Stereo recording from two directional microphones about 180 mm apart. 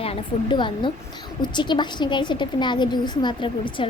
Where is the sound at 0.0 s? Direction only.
30° left (ahead or behind).